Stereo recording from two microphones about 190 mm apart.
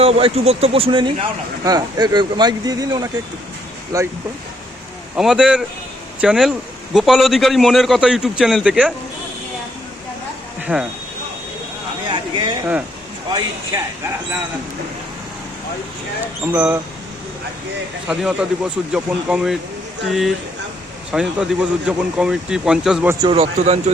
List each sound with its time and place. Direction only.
0.0 s speech: 30° right (ahead or behind)
5.1 s speech: 5° right (ahead or behind)
10.7 s speech: 10° right (ahead or behind)
12.0 s a sound: 25° right (ahead or behind)
16.5 s speech: 10° right (ahead or behind)
18.1 s speech: 5° right (ahead or behind)
23.2 s speech: 30° right (ahead or behind)